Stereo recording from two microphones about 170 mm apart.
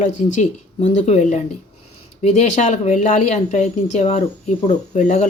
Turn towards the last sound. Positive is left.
turn(degrees=40)  # may be behind; listen again after turning